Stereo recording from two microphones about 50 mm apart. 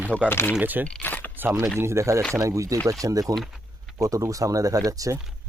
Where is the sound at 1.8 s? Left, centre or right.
Right.